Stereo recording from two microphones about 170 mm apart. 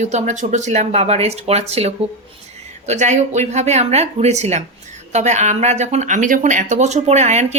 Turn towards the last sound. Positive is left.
turn(degrees=-40)  # may be behind; listen again after turning